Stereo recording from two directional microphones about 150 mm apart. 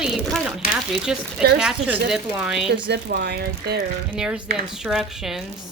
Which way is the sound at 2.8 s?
90° right.